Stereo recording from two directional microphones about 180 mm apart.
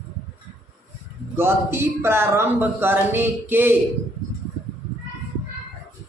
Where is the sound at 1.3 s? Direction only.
15° right (ahead or behind).